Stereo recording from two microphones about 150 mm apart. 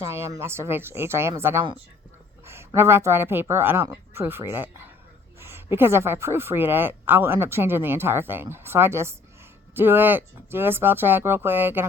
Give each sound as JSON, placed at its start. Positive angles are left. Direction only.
{"t": 0.3, "sound": "a woman's voice", "side_deg": -15}